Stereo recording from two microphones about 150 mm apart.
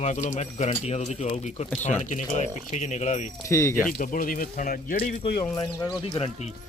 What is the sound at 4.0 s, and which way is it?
Speech, 65° left (ahead or behind).